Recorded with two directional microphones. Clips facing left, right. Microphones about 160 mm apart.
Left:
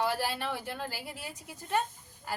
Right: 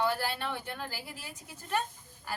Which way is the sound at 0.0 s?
10° left (ahead or behind).